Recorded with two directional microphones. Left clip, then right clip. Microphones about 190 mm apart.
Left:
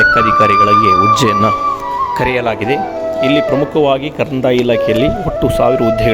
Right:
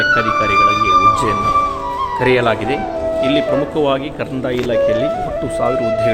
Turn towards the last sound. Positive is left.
turn(degrees=35)  # may be behind; listen again after turning